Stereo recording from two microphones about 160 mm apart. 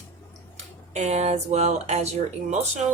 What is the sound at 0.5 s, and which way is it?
Speech, 45° right (ahead or behind).